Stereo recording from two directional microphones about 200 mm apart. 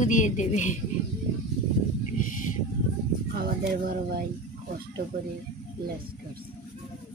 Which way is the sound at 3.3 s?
50° right (ahead or behind).